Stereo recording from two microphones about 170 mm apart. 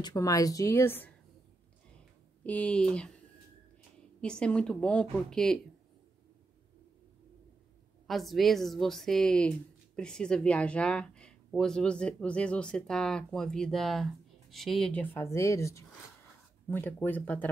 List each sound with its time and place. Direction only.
0.0 s a woman's voice: 20° left (ahead or behind)
2.4 s a woman's voice: 10° left (ahead or behind)
4.2 s a woman's voice: 5° left (ahead or behind)
8.1 s a woman's voice: centre (ahead or behind)